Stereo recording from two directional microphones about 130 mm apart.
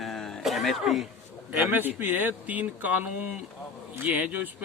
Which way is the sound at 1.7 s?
15° right (ahead or behind).